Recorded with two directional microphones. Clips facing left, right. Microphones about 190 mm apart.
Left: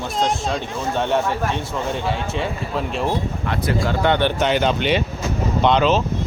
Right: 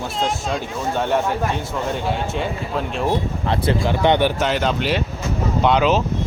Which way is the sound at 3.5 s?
30° right (ahead or behind).